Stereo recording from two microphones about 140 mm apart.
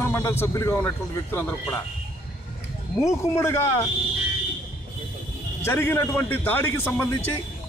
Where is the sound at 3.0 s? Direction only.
20° left (ahead or behind).